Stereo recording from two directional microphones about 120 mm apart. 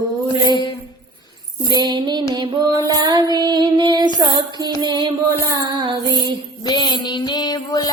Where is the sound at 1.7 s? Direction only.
35° right (ahead or behind).